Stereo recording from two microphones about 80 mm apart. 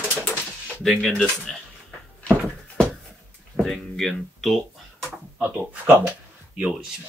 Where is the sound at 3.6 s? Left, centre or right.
Centre.